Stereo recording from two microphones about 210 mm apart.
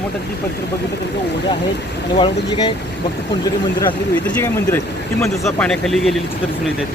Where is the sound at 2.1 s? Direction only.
25° left (ahead or behind).